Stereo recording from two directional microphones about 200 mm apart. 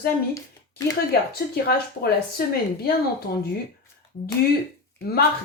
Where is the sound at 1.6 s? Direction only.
50° left (ahead or behind).